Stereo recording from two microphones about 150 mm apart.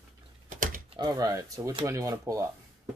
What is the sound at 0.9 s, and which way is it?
Speech, 25° right (ahead or behind).